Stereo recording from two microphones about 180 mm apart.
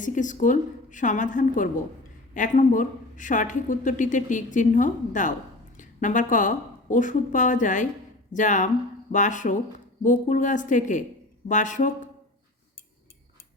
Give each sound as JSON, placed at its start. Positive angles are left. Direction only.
{"t": 0.0, "sound": "a woman's voice", "side_deg": 45}